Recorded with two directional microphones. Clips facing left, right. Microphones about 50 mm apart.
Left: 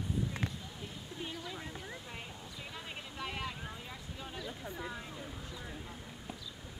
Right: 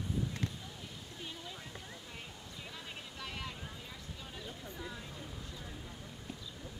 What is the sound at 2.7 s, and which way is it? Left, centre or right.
Vehicle, centre.